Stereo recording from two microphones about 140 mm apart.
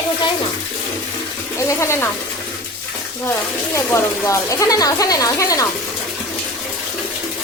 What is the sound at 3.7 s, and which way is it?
Speech, 20° left (ahead or behind).